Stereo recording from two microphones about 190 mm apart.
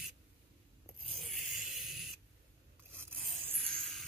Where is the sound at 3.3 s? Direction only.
Centre (ahead or behind).